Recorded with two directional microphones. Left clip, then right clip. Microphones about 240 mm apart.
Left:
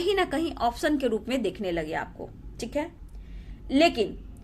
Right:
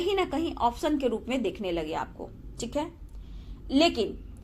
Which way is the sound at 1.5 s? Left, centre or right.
Left.